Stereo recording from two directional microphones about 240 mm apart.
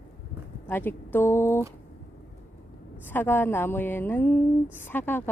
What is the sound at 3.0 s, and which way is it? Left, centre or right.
A woman's voice, centre.